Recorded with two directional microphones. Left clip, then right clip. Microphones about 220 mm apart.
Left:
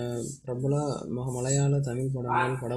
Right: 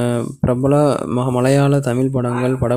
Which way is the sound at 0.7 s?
45° right (ahead or behind).